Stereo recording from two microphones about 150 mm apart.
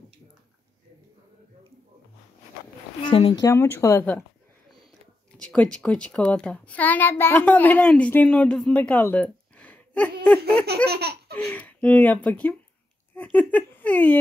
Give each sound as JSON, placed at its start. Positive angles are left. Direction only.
{"t": 3.1, "sound": "speech", "side_deg": 40}
{"t": 3.3, "sound": "speech", "side_deg": 20}
{"t": 5.4, "sound": "a child's voice", "side_deg": 5}
{"t": 10.9, "sound": "baby laughter", "side_deg": -90}
{"t": 11.3, "sound": "a child's voice", "side_deg": 10}